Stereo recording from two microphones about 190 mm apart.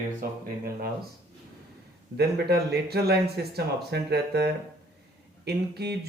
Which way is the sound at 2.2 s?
55° right (ahead or behind).